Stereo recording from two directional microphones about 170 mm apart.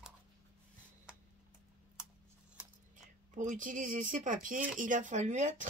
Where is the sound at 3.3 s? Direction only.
50° right (ahead or behind).